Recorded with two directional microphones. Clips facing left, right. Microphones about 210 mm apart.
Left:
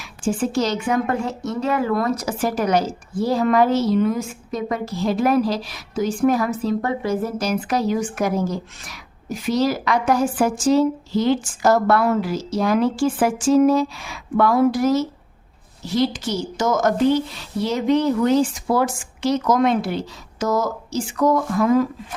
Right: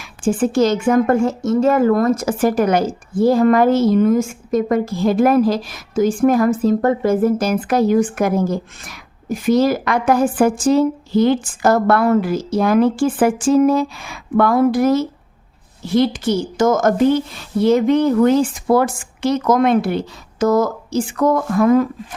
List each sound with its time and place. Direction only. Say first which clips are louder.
0.0 s speech: right 5 dB; 55° right (ahead or behind)